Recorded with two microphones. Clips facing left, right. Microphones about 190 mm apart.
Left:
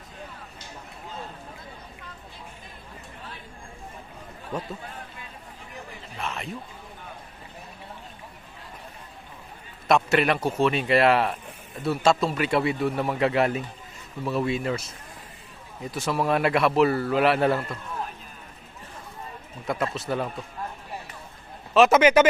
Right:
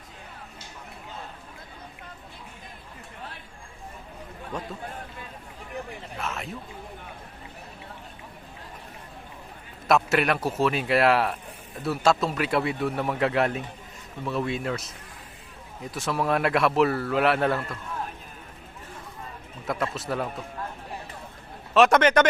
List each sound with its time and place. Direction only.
6.1 s a sound: centre (ahead or behind)
9.8 s speech: centre (ahead or behind)
19.6 s speech: centre (ahead or behind)
21.7 s speech: 5° left (ahead or behind)